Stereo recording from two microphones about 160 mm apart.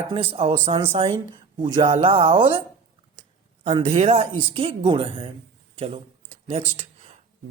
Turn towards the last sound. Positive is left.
turn(degrees=-35)  # may be behind; listen again after turning